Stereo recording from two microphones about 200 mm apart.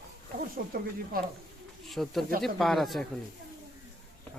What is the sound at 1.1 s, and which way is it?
Speech, 45° right (ahead or behind).